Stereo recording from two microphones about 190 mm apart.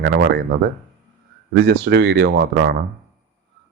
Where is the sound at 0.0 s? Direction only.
60° right (ahead or behind).